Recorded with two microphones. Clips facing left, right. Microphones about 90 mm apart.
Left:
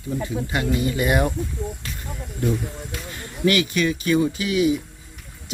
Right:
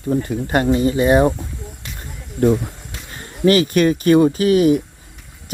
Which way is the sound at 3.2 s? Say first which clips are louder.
Right 6 dB; 35° right (ahead or behind).